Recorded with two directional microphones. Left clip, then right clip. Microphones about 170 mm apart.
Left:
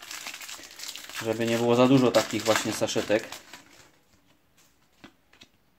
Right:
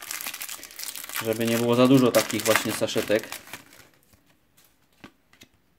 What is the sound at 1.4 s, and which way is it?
Speech, 25° right (ahead or behind).